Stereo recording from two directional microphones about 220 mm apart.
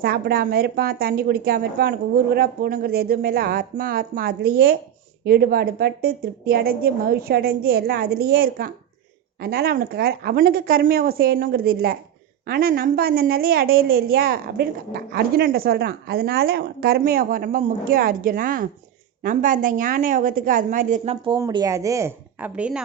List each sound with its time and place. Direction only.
0.0 s a woman's voice: 45° right (ahead or behind)
21.3 s a woman's voice: 15° right (ahead or behind)